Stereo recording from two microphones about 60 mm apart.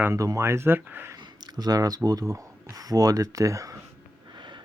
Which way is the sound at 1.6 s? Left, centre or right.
Right.